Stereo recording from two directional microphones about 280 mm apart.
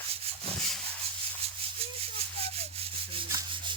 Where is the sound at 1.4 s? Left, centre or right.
Right.